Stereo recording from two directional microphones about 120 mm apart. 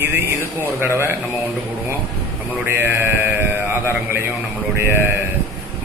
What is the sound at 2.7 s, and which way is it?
A man's voice, 20° right (ahead or behind).